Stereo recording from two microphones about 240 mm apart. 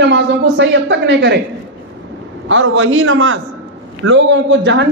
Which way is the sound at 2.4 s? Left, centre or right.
Right.